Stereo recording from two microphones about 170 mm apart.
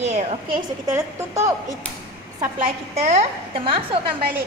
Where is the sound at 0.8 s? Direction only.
20° right (ahead or behind).